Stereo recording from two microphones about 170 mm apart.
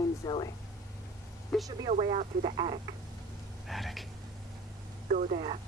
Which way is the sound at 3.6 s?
Centre (ahead or behind).